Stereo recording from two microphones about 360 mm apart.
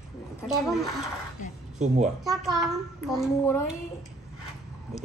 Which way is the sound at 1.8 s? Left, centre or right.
Centre.